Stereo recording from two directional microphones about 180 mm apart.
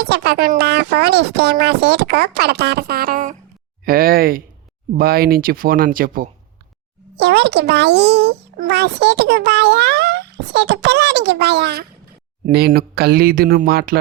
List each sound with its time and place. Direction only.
0.0 s speech: 60° right (ahead or behind)
7.2 s a child's voice: 65° right (ahead or behind)